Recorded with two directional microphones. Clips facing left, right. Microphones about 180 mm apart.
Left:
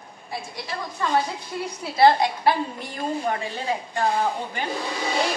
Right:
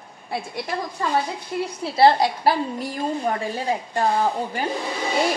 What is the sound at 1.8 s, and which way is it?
A woman's voice, 30° right (ahead or behind).